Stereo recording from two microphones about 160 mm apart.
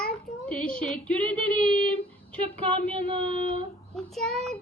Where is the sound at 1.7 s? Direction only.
35° right (ahead or behind).